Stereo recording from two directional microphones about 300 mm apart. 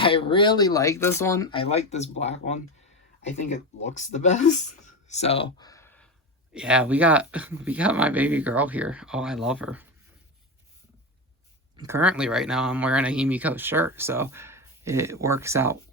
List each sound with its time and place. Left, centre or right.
0.0 s speech: centre
11.8 s speech: centre